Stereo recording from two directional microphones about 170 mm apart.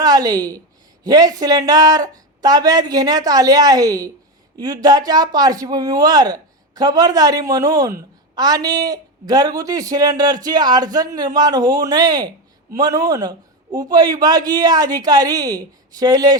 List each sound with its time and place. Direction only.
0.0 s a woman's voice: 20° right (ahead or behind)